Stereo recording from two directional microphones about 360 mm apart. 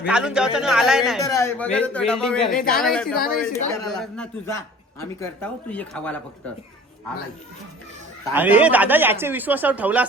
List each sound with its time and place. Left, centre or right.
0.0 s speech: centre
2.6 s speech: left
2.8 s speech: centre
8.3 s speech: centre